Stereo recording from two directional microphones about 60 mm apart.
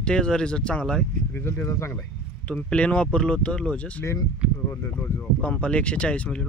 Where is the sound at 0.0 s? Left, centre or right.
Centre.